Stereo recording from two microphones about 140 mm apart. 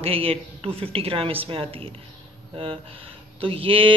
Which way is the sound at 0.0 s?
45° right (ahead or behind).